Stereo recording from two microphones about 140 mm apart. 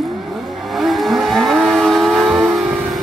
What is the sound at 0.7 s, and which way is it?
Vehicle, centre (ahead or behind).